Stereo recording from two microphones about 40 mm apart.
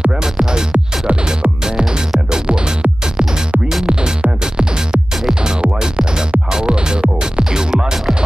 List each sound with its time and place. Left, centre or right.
0.2 s music: centre